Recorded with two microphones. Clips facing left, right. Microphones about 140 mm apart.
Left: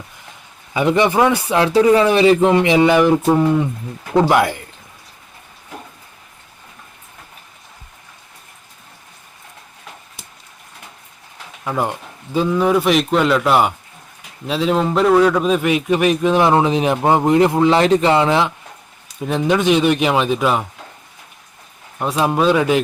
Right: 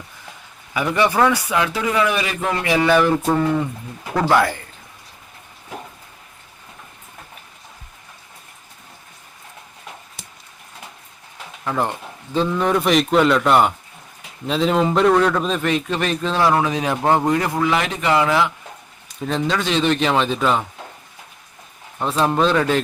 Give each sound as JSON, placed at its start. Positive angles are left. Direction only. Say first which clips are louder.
{"t": 0.7, "sound": "a man's voice", "louder": "left 4 dB", "side_deg": 25}
{"t": 11.6, "sound": "a man's voice", "louder": "left 1 dB", "side_deg": 10}
{"t": 21.9, "sound": "a man's voice", "louder": "left 1 dB", "side_deg": 10}